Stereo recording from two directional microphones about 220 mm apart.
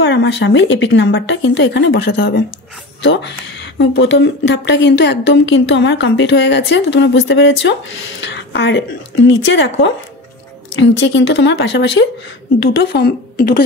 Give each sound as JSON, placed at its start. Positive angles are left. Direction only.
{"t": 0.0, "sound": "speech", "side_deg": 55}